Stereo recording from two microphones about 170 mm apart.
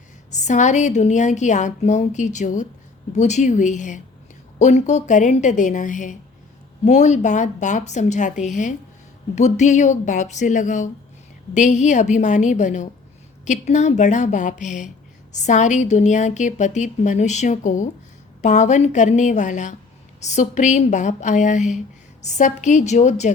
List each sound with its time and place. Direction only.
0.3 s a woman's voice: 45° left (ahead or behind)